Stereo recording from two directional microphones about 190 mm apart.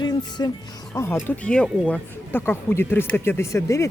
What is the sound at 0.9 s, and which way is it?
Speech, 15° left (ahead or behind).